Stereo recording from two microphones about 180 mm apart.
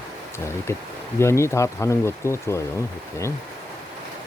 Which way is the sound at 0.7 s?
15° left (ahead or behind).